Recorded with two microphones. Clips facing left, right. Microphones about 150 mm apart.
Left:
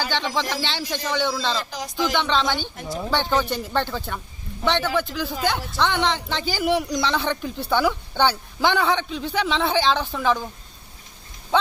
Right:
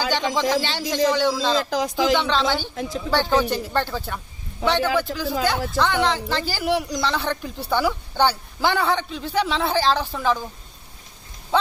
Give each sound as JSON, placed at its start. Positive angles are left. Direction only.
{"t": 0.1, "sound": "speech", "side_deg": -15}